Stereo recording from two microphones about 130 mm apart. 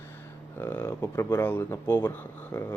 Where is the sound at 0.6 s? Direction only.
15° left (ahead or behind).